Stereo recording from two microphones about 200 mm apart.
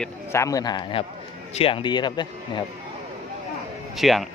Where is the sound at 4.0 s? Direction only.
Centre (ahead or behind).